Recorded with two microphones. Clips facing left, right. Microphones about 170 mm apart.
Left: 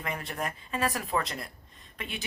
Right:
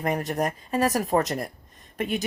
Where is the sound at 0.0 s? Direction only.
45° right (ahead or behind).